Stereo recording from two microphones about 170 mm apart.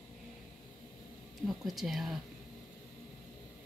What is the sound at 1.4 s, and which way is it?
Speech, centre (ahead or behind).